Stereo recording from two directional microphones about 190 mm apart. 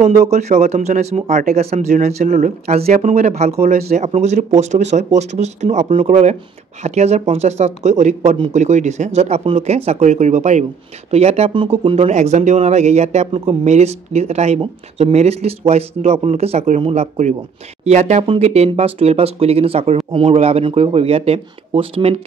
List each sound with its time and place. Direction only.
0.0 s speech: 35° right (ahead or behind)